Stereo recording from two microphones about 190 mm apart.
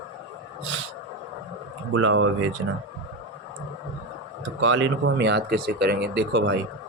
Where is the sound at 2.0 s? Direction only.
90° right.